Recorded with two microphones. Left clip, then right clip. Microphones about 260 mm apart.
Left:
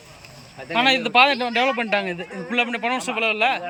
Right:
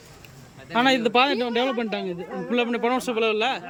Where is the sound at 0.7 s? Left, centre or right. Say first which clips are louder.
Left 2 dB; centre.